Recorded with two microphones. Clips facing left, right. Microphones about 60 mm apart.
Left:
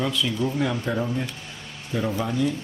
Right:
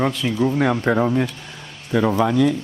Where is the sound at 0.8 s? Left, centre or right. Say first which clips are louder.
Right 8 dB; right.